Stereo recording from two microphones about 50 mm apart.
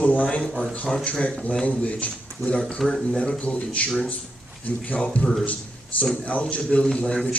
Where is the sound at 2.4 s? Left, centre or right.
Right.